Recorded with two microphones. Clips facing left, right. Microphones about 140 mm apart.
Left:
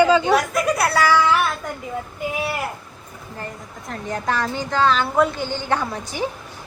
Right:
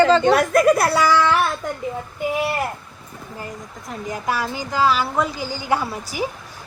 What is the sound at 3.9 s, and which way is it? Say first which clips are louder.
A woman's voice: left 1 dB; 5° right (ahead or behind).